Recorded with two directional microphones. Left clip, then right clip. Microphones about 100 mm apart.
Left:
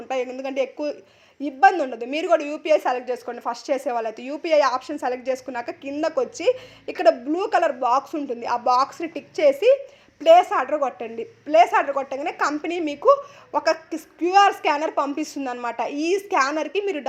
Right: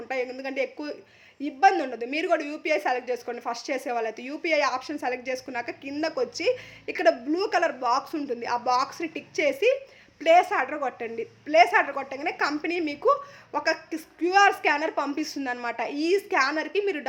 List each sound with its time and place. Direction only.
0.1 s a woman's voice: 20° left (ahead or behind)